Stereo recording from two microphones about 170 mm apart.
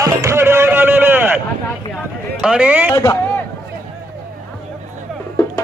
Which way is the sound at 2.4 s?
5° right (ahead or behind).